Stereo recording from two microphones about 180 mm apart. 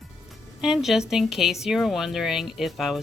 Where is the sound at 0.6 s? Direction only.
Centre (ahead or behind).